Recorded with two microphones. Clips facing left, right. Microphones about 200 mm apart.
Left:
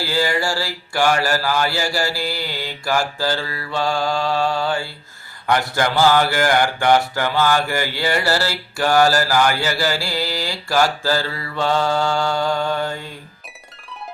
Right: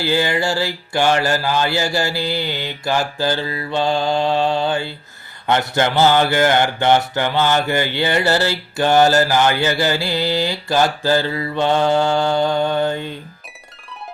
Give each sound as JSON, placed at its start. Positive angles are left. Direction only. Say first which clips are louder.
{"t": 0.0, "sound": "speech", "louder": "right 2 dB", "side_deg": -20}